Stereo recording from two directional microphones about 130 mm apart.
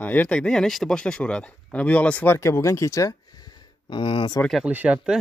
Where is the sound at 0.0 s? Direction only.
15° left (ahead or behind); by 4.4 s 40° left (ahead or behind).